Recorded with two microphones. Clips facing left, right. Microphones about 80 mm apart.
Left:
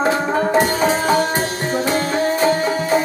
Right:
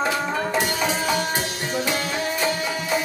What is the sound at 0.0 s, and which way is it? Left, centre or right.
Tabla, left.